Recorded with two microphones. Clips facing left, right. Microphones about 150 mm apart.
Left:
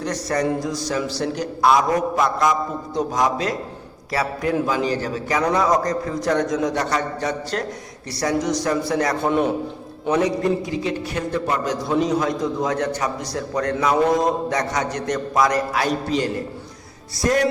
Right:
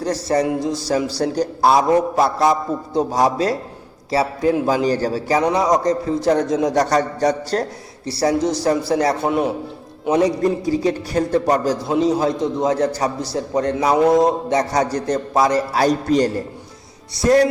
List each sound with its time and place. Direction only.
0.0 s speech: 30° right (ahead or behind)
0.6 s a sound: 25° right (ahead or behind)
1.2 s a man's voice: 35° right (ahead or behind)
4.1 s a sound: 25° right (ahead or behind)
4.6 s a man's voice: 35° right (ahead or behind)
5.5 s a man's voice: 20° right (ahead or behind)
9.2 s a man's voice: 10° right (ahead or behind)
10.1 s a man's voice: 35° right (ahead or behind)